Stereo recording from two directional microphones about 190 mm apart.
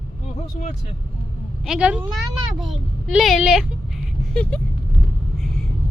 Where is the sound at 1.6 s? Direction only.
5° right (ahead or behind).